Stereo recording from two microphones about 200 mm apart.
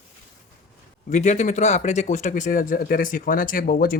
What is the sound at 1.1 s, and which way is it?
Speech, 35° left (ahead or behind).